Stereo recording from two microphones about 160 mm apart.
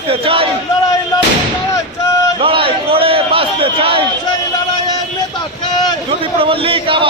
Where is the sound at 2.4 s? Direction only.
35° right (ahead or behind).